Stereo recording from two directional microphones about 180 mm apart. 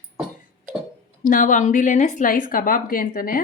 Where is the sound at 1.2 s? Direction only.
50° left (ahead or behind).